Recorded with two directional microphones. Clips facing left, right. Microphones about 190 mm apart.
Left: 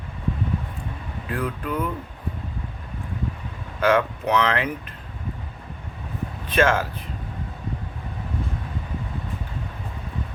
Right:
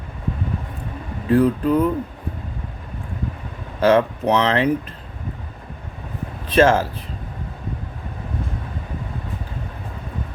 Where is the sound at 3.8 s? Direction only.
30° right (ahead or behind).